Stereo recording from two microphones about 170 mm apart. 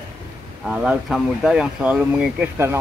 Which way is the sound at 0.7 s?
5° right (ahead or behind).